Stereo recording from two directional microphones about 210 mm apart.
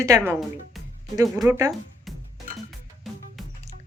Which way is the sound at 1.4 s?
15° right (ahead or behind).